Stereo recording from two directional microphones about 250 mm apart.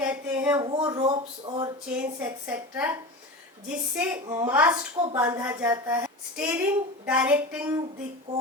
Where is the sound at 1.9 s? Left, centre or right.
Centre.